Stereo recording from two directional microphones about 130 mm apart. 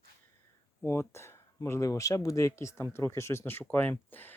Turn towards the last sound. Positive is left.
turn(degrees=15)  # may be behind; listen again after turning